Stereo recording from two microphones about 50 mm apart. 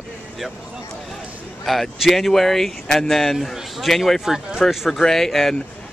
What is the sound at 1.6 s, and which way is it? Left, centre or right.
Speech, centre.